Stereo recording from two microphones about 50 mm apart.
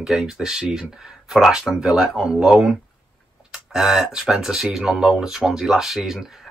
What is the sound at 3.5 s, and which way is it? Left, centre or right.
Speech, centre.